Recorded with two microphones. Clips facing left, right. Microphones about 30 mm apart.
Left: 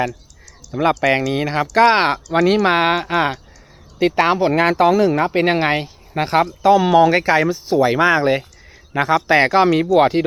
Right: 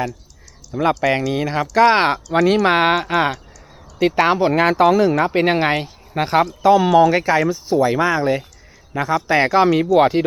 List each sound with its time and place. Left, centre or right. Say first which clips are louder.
0.7 s speech: left 1 dB; centre
6.9 s a man's voice: left 1 dB; centre
9.6 s speech: even; centre